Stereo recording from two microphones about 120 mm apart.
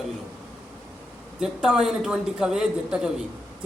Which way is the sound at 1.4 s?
5° right (ahead or behind).